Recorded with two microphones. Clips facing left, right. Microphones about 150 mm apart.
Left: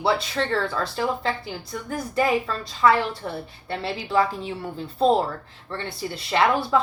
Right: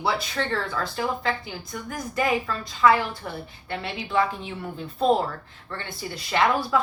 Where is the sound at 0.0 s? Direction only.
30° left (ahead or behind).